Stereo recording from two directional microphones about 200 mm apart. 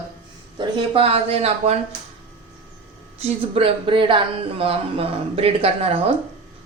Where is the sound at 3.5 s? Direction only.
30° right (ahead or behind).